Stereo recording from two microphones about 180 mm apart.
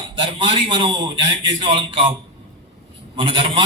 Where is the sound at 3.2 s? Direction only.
30° right (ahead or behind).